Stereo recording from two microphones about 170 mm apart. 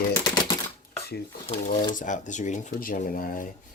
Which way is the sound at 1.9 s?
50° left (ahead or behind).